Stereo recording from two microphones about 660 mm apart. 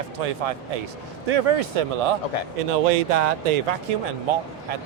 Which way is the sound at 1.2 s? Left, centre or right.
Right.